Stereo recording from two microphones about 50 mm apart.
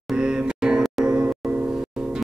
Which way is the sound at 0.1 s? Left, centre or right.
Centre.